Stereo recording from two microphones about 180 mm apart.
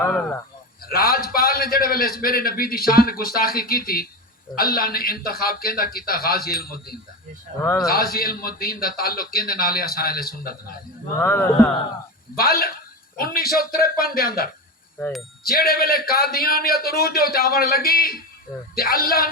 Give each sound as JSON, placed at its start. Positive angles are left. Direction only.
{"t": 0.0, "sound": "speech", "side_deg": 10}
{"t": 0.9, "sound": "a man's voice", "side_deg": 55}
{"t": 7.5, "sound": "speech", "side_deg": -45}
{"t": 7.9, "sound": "a man's voice", "side_deg": 55}
{"t": 11.2, "sound": "speech", "side_deg": 10}
{"t": 12.4, "sound": "a man's voice", "side_deg": 55}
{"t": 14.9, "sound": "a sound", "side_deg": 10}
{"t": 15.4, "sound": "a man's voice", "side_deg": 55}